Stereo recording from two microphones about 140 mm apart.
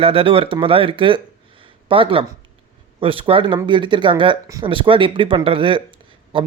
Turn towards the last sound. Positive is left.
turn(degrees=-40)  # may be behind; listen again after turning